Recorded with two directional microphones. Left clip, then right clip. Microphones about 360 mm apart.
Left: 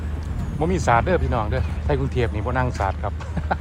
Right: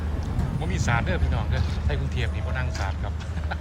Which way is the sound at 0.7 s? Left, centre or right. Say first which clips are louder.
Left 9 dB; centre.